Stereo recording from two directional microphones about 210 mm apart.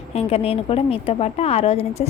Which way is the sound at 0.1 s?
30° left (ahead or behind).